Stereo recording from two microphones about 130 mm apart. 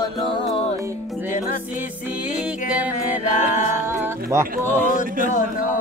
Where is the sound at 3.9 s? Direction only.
20° right (ahead or behind).